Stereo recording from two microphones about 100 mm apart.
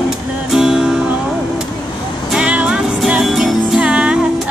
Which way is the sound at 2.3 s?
10° right (ahead or behind).